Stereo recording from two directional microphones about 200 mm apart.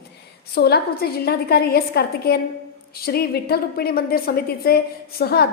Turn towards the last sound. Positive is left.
turn(degrees=50)  # may be behind; listen again after turning